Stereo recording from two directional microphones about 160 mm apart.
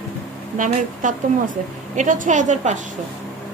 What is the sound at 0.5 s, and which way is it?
A woman's voice, 55° right (ahead or behind).